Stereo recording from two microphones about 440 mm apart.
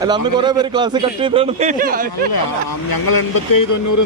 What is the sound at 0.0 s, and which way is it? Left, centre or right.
A man's voice, centre.